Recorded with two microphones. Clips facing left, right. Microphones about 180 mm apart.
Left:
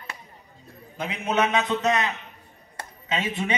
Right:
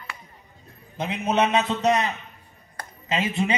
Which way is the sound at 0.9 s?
25° right (ahead or behind).